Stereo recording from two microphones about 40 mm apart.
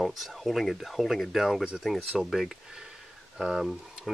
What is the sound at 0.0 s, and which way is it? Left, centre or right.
Speech, centre.